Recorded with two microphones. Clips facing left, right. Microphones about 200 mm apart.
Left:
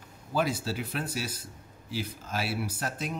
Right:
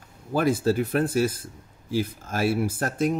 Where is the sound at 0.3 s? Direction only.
50° right (ahead or behind).